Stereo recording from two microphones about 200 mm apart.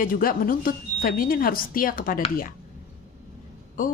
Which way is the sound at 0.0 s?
45° left (ahead or behind).